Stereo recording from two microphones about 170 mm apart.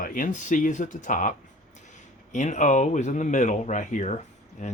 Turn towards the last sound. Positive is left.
turn(degrees=40)  # may be behind; listen again after turning